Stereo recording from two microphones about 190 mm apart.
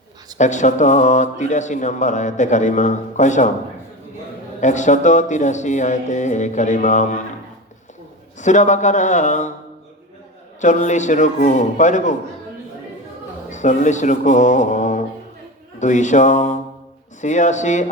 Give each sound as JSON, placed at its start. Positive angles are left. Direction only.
{"t": 0.3, "sound": "speech", "side_deg": 40}
{"t": 4.6, "sound": "speech", "side_deg": 40}
{"t": 8.4, "sound": "speech", "side_deg": 40}
{"t": 10.6, "sound": "speech", "side_deg": 40}
{"t": 13.5, "sound": "speech", "side_deg": 40}